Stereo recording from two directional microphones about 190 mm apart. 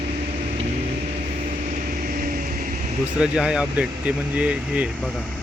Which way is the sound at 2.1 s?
50° right (ahead or behind).